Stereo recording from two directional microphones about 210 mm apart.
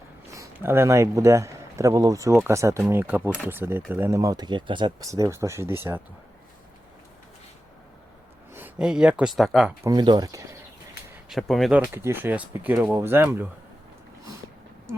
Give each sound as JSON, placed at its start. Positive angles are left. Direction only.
{"t": 0.3, "sound": "speech", "side_deg": -10}
{"t": 8.5, "sound": "speech", "side_deg": -5}
{"t": 9.8, "sound": "speech", "side_deg": -20}
{"t": 11.1, "sound": "speech", "side_deg": 0}